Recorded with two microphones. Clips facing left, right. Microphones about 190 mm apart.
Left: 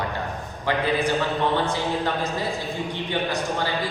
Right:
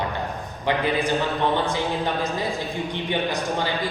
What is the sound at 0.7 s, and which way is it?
Speech, 20° right (ahead or behind).